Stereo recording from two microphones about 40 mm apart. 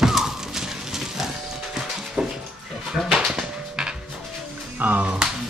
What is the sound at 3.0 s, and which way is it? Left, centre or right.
Bird, right.